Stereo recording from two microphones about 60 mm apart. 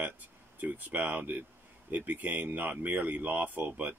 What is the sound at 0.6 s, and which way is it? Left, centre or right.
Speech, right.